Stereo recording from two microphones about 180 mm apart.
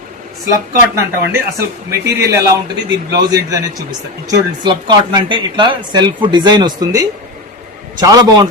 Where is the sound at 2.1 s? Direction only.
15° right (ahead or behind).